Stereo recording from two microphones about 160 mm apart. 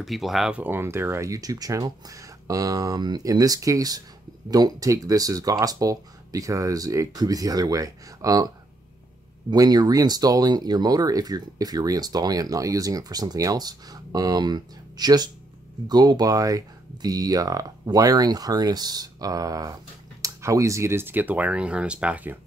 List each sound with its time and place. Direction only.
0.0 s speech: centre (ahead or behind); by 8.5 s 20° right (ahead or behind)
9.5 s speech: 25° right (ahead or behind); by 22.4 s 10° right (ahead or behind)